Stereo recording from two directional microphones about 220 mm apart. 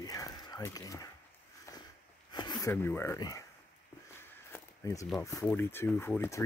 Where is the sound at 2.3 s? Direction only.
20° left (ahead or behind).